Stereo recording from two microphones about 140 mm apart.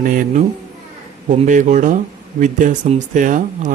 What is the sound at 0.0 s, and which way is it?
Speech, 70° right (ahead or behind).